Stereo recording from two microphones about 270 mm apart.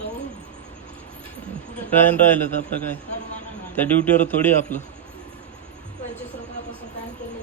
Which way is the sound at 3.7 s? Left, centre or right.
Centre.